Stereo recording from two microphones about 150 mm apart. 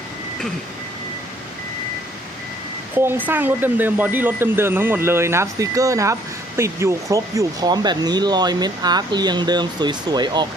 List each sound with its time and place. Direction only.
2.9 s speech: 15° right (ahead or behind)